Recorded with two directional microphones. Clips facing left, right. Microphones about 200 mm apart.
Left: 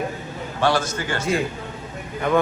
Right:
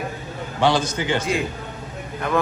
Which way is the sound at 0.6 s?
15° right (ahead or behind).